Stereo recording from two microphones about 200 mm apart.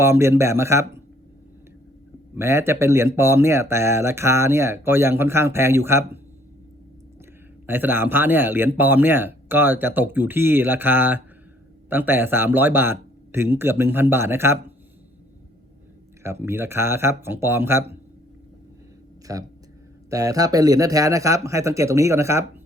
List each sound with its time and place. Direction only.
0.0 s speech: 15° right (ahead or behind)
2.3 s speech: 15° right (ahead or behind)
7.7 s speech: 10° right (ahead or behind)
16.2 s speech: 10° right (ahead or behind)
20.1 s speech: 15° right (ahead or behind)